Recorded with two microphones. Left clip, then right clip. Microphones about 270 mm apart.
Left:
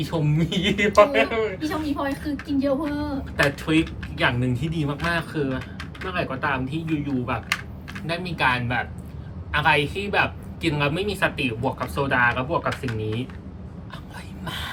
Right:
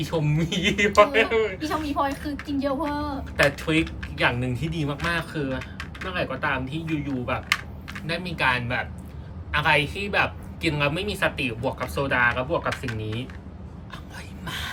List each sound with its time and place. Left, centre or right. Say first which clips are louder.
0.0 s speech: left 1 dB; centre
1.6 s speech: right 1 dB; centre
3.3 s speech: even; centre
14.4 s a sound: left 1 dB; centre